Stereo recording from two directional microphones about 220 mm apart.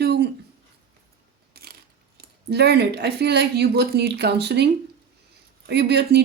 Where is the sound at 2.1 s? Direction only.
45° right (ahead or behind).